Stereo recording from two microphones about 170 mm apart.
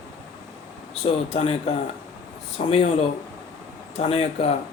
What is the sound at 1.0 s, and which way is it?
Speech, 35° left (ahead or behind).